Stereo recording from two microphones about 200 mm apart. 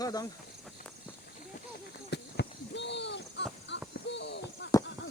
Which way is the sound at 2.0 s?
55° left (ahead or behind).